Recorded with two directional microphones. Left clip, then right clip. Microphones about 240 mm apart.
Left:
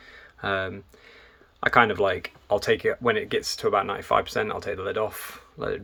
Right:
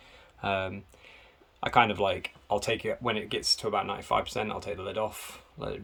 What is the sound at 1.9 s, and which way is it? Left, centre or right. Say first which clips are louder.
Speech: left 4 dB; centre.